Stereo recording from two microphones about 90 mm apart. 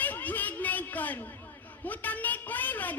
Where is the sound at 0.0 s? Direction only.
20° left (ahead or behind).